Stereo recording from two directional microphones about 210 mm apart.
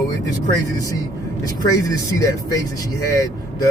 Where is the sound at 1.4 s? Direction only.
15° left (ahead or behind).